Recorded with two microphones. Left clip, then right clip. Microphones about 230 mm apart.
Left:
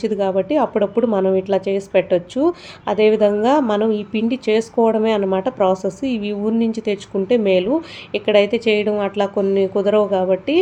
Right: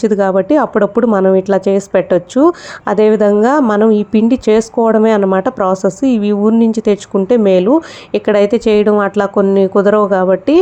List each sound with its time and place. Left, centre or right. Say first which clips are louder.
0.0 s a woman's voice: right 7 dB; right